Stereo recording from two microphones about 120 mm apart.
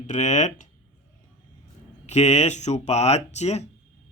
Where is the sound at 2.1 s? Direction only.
70° left (ahead or behind).